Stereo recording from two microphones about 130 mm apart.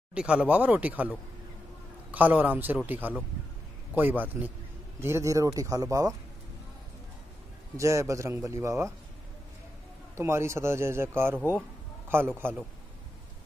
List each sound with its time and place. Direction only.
0.1 s a man's voice: 10° right (ahead or behind); by 6.1 s 25° right (ahead or behind)
7.7 s a man's voice: 25° right (ahead or behind)
10.1 s a man's voice: 20° right (ahead or behind)